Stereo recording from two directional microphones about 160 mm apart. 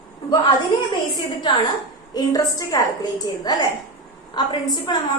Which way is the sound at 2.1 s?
25° left (ahead or behind).